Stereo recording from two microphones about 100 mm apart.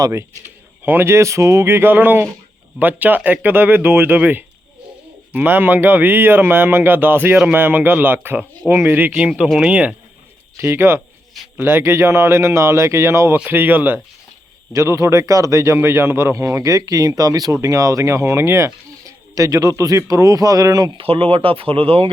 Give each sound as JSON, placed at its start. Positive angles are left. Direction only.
{"t": 0.9, "sound": "speech", "side_deg": -25}
{"t": 10.6, "sound": "speech", "side_deg": -25}
{"t": 21.0, "sound": "speech", "side_deg": -70}